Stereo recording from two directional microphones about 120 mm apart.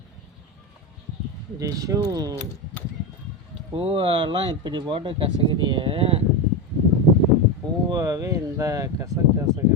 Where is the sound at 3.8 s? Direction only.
50° right (ahead or behind).